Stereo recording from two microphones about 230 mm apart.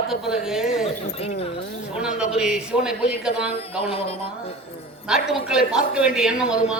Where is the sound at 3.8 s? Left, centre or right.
Left.